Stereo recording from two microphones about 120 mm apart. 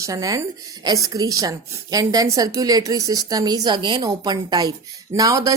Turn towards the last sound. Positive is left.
turn(degrees=-30)  # may be behind; listen again after turning